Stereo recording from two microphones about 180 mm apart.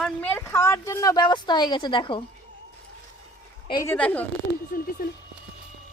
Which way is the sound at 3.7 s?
20° left (ahead or behind).